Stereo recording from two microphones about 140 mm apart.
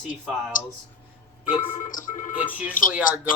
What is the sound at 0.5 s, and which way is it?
Speech, 70° left (ahead or behind).